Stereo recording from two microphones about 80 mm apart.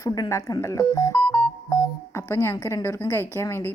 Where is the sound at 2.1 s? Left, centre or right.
Left.